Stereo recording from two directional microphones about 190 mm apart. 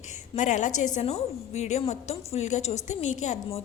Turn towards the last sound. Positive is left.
turn(degrees=40)  # may be behind; listen again after turning